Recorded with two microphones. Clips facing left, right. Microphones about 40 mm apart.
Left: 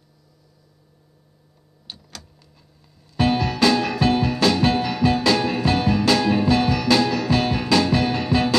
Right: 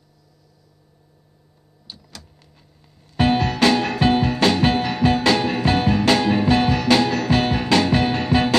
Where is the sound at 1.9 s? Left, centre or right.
Left.